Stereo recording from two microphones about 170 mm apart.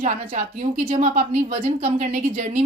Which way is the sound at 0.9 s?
45° right (ahead or behind).